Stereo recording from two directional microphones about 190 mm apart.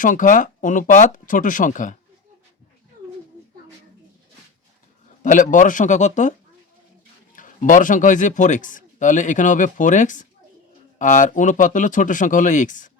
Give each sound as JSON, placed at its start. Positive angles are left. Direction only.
{"t": 0.0, "sound": "speech", "side_deg": 45}
{"t": 5.2, "sound": "a man's voice", "side_deg": 45}
{"t": 7.3, "sound": "a man's voice", "side_deg": 45}